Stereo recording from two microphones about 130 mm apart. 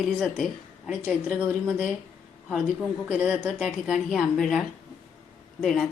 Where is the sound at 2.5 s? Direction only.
5° right (ahead or behind).